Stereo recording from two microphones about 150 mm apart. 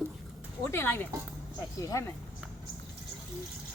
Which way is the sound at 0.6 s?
15° left (ahead or behind).